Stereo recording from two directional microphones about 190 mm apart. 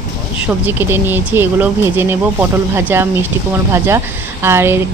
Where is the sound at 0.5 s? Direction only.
10° right (ahead or behind).